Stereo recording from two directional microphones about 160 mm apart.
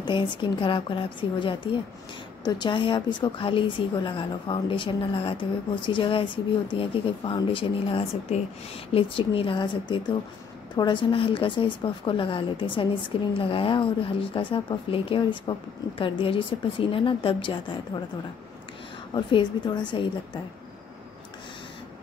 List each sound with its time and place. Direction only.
0.0 s a woman's voice: 30° left (ahead or behind)
19.1 s a woman's voice: 25° left (ahead or behind)